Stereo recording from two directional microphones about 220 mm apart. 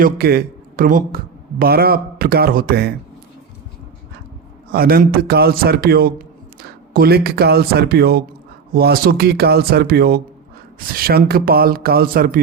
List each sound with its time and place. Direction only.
0.0 s speech: 45° right (ahead or behind)
4.7 s a man's voice: 40° right (ahead or behind)